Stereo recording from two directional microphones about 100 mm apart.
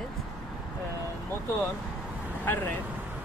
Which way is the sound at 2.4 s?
20° left (ahead or behind).